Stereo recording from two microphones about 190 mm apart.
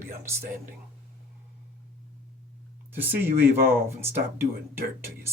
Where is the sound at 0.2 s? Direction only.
15° right (ahead or behind).